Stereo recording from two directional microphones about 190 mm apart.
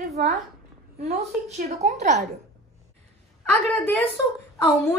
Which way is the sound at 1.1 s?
35° right (ahead or behind).